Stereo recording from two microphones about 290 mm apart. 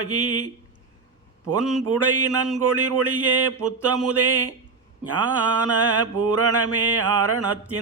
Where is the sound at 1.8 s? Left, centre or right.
Right.